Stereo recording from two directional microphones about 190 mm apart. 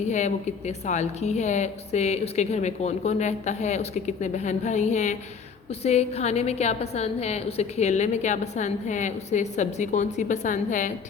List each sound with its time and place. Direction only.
0.1 s a woman's voice: 40° left (ahead or behind)